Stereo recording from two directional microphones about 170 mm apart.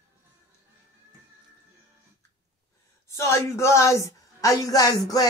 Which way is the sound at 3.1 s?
15° left (ahead or behind).